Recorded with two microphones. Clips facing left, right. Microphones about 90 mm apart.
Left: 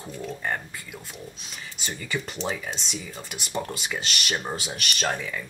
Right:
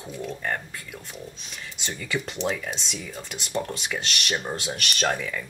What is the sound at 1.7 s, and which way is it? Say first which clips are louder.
Speech: right 1 dB; centre (ahead or behind).